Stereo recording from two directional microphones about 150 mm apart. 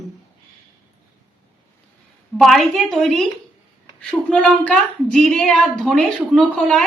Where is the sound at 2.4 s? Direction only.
Centre (ahead or behind).